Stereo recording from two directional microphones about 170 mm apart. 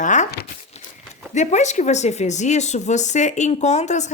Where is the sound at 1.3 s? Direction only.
45° left (ahead or behind).